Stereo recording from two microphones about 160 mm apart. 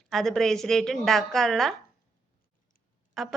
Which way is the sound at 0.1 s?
Centre (ahead or behind).